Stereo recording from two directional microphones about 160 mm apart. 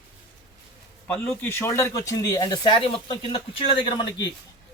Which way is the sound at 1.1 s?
10° left (ahead or behind).